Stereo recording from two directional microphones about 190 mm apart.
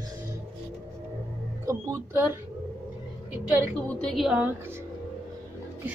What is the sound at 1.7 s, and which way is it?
Speech, 15° right (ahead or behind).